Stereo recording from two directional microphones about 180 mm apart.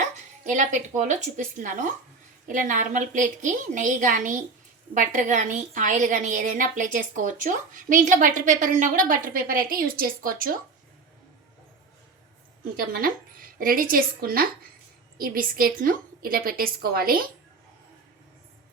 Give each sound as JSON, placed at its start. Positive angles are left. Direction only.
{"t": 0.4, "sound": "a woman's voice", "side_deg": -45}
{"t": 12.7, "sound": "a woman's voice", "side_deg": -55}